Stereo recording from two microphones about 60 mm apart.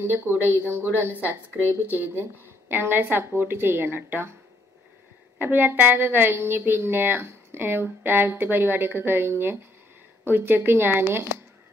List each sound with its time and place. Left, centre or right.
0.0 s a woman's voice: right
5.4 s a woman's voice: right